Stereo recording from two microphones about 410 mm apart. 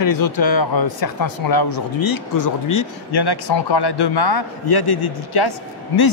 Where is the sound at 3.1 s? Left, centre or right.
Left.